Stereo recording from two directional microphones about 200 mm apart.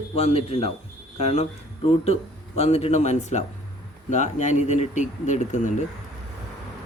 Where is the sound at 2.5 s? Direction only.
30° left (ahead or behind).